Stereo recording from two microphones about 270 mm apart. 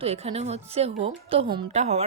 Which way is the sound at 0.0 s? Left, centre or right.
Right.